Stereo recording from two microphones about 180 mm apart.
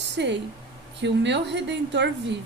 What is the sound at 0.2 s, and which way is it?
Speech, 70° right (ahead or behind).